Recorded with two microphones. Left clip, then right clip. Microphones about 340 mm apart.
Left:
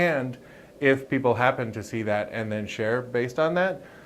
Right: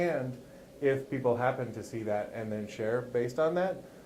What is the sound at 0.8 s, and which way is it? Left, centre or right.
Speech, left.